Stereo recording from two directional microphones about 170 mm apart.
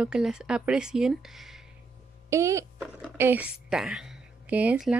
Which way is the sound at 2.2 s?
15° right (ahead or behind).